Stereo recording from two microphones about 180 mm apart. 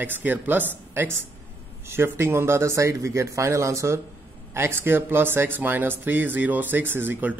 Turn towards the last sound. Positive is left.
turn(degrees=-10)  # may be behind; listen again after turning